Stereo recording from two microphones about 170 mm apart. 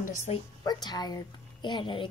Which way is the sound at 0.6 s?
25° left (ahead or behind).